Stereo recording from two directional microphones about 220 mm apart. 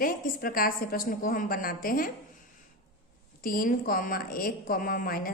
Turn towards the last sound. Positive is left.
turn(degrees=40)  # may be behind; listen again after turning